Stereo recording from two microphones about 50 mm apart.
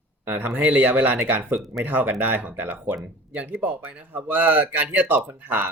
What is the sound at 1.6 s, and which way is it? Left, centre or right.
Speech, centre.